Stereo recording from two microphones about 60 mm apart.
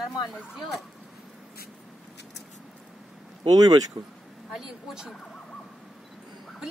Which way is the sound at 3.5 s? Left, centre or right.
Right.